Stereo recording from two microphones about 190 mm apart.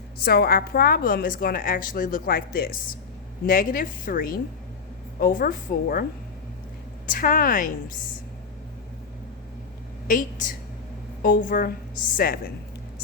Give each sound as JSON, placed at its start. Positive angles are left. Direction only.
{"t": 0.2, "sound": "a woman's voice", "side_deg": 55}
{"t": 7.1, "sound": "a woman's voice", "side_deg": 45}
{"t": 10.1, "sound": "a woman's voice", "side_deg": 45}